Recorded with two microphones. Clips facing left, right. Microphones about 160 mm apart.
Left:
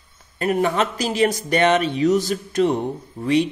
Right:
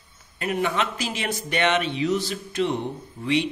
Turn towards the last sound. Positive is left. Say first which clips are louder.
# left 5 dB
turn(degrees=45)  # may be behind; listen again after turning